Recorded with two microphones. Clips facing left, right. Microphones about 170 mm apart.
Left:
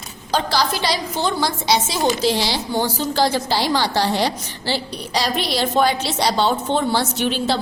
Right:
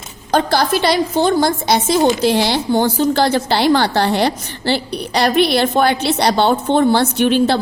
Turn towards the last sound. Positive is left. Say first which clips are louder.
# right 7 dB
turn(degrees=-60)  # may be behind; listen again after turning